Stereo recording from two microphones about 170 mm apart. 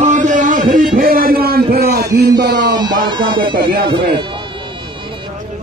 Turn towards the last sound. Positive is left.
turn(degrees=-65)  # may be behind; listen again after turning